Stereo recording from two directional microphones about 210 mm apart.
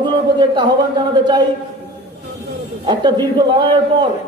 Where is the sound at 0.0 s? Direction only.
20° right (ahead or behind).